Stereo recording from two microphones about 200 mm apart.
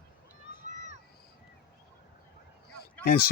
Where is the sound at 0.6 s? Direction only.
35° right (ahead or behind).